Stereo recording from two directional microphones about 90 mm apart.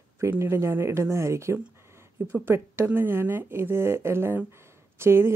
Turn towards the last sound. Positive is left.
turn(degrees=-30)  # may be behind; listen again after turning